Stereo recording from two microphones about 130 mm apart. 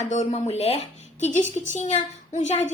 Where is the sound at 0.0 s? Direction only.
65° left (ahead or behind).